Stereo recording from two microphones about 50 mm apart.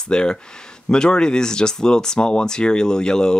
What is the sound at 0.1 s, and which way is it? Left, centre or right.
Speech, centre.